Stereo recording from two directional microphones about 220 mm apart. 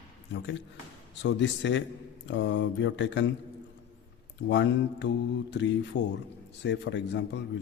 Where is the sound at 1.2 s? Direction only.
55° left (ahead or behind).